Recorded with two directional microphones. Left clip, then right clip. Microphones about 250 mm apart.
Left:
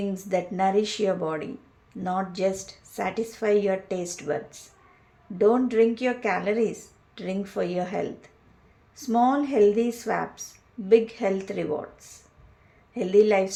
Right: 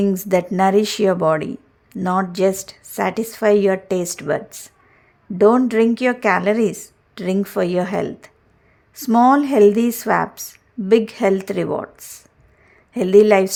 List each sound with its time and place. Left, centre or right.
0.0 s speech: right